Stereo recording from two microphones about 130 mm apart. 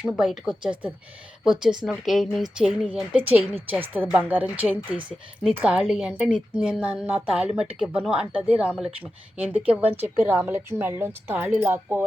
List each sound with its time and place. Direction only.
0.0 s speech: centre (ahead or behind)
1.9 s speech: centre (ahead or behind); by 12.0 s 15° right (ahead or behind)